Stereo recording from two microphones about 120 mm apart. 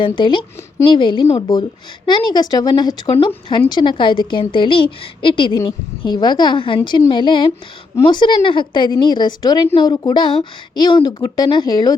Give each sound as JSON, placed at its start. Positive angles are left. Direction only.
{"t": 0.0, "sound": "a woman's voice", "side_deg": 40}